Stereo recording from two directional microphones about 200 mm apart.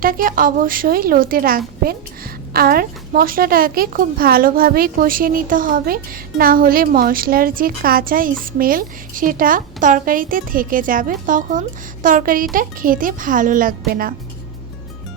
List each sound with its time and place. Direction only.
0.0 s a woman's voice: 45° right (ahead or behind)